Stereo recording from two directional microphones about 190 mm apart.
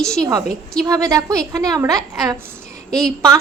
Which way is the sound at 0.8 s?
20° right (ahead or behind).